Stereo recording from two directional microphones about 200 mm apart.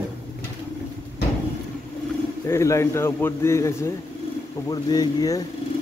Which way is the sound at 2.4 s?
15° left (ahead or behind).